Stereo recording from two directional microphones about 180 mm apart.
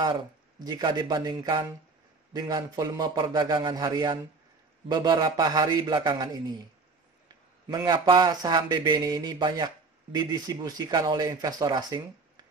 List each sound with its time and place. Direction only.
0.7 s speech: 25° right (ahead or behind)
7.6 s speech: 20° right (ahead or behind)